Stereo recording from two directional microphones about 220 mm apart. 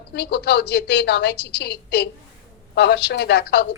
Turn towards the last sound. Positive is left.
turn(degrees=50)  # may be behind; listen again after turning